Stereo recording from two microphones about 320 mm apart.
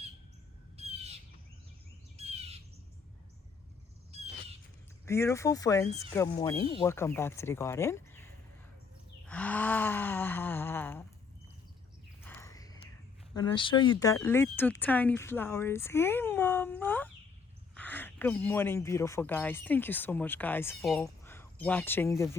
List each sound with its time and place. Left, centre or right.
0.8 s squawk: centre
2.1 s bird: centre
4.1 s owl: centre
5.0 s speech: centre
9.2 s a sound: centre
12.2 s a sound: centre
13.3 s speech: centre